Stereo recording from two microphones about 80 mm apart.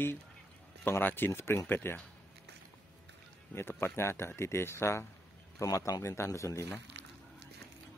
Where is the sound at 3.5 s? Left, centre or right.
Left.